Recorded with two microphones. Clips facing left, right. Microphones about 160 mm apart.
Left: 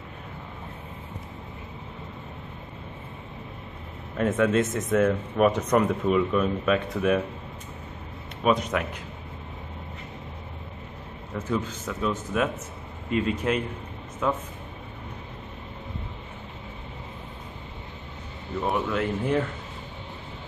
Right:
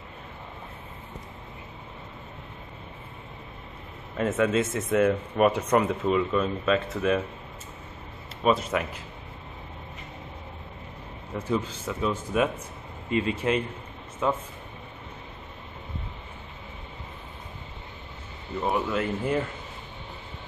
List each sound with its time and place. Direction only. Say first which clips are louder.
4.2 s speech: left 2 dB; 5° right (ahead or behind)
6.0 s speech: left 1 dB; 5° left (ahead or behind)
8.4 s speech: even; 5° left (ahead or behind)
11.3 s speech: even; 10° right (ahead or behind)
18.6 s speech: even; centre (ahead or behind)